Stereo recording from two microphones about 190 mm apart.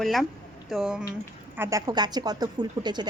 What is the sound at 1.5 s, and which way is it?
Speech, 15° right (ahead or behind).